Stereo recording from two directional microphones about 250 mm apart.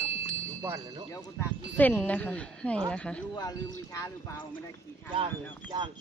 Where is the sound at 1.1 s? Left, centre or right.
Centre.